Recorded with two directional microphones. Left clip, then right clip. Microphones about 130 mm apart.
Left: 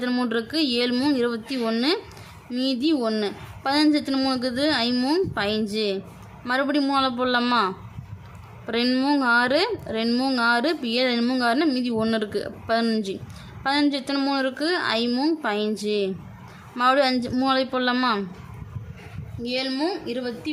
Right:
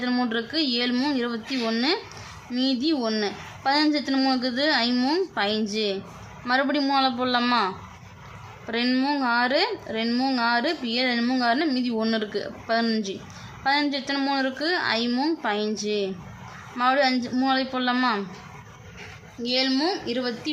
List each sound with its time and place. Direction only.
0.0 s a woman's voice: 25° left (ahead or behind)
19.4 s a woman's voice: 20° left (ahead or behind)